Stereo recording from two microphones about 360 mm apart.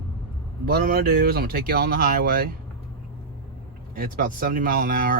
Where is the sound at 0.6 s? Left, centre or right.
Right.